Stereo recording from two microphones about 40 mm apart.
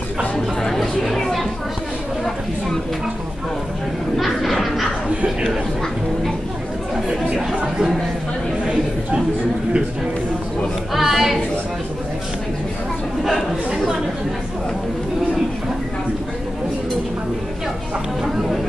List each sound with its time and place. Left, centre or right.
0.7 s chatter: centre
4.2 s a sound: centre
7.1 s chatter: centre
10.9 s chatter: centre
18.2 s chatter: centre